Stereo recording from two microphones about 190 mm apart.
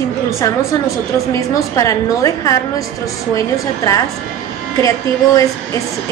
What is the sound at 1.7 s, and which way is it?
A woman's voice, 15° left (ahead or behind).